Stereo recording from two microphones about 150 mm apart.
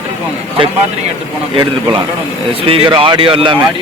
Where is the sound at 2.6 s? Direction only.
35° right (ahead or behind).